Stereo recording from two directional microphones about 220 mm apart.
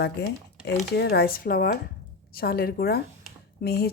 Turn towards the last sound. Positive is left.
turn(degrees=45)  # may be behind; listen again after turning